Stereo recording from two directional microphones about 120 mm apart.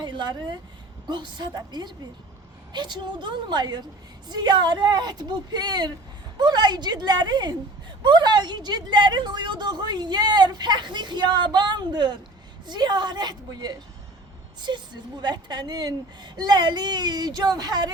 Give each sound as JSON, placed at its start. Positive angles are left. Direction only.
{"t": 0.0, "sound": "a woman's voice", "side_deg": -40}